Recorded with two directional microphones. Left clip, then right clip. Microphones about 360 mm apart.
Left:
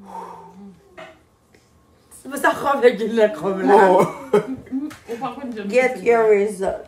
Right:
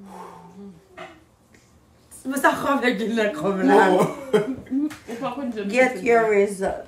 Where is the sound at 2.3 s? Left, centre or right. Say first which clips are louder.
Left 1 dB; centre.